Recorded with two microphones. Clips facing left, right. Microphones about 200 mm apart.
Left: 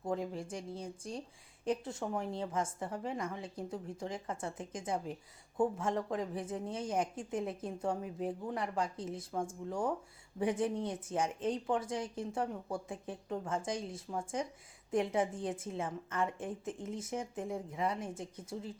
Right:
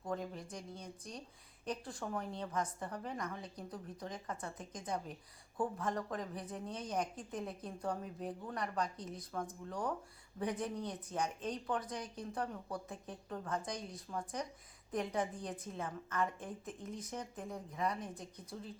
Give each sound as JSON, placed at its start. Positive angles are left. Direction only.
{"t": 0.0, "sound": "a woman's voice", "side_deg": 25}